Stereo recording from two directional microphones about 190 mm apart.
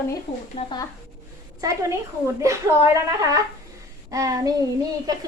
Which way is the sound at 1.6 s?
15° right (ahead or behind).